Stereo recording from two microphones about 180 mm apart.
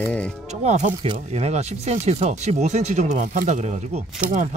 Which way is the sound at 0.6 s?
40° right (ahead or behind).